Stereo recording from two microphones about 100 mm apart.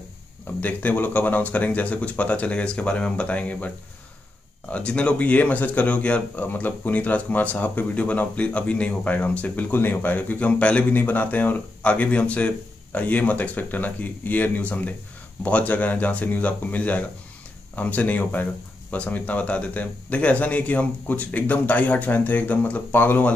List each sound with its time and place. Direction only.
0.6 s speech: 15° left (ahead or behind)